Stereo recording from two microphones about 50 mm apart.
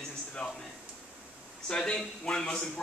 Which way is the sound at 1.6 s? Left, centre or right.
Centre.